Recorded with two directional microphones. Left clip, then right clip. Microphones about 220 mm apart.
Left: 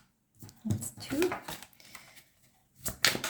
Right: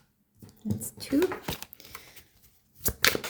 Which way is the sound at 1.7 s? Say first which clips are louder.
Right 4 dB; 40° right (ahead or behind).